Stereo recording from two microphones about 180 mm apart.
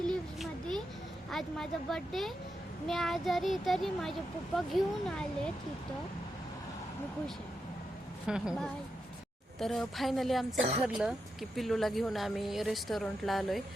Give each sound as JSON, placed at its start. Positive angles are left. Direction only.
{"t": 0.1, "sound": "a sound", "side_deg": 5}
{"t": 1.3, "sound": "speech", "side_deg": 0}
{"t": 8.3, "sound": "speech", "side_deg": 0}